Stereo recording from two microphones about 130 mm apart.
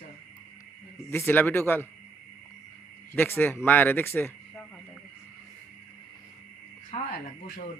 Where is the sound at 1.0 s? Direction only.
15° left (ahead or behind).